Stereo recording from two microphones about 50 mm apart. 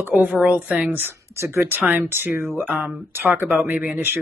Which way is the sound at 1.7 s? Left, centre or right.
Right.